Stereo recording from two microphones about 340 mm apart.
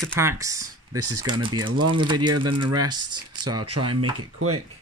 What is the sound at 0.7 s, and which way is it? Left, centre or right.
Speech, right.